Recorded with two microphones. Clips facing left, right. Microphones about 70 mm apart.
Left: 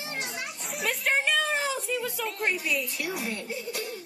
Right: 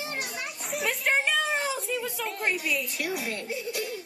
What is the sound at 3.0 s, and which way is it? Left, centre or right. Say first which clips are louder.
Speech: right 1 dB; left.